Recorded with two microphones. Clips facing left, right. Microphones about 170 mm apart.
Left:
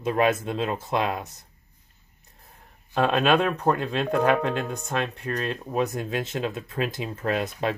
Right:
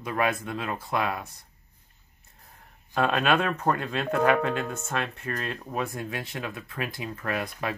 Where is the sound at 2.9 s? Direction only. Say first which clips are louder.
Left 3 dB; 20° left (ahead or behind).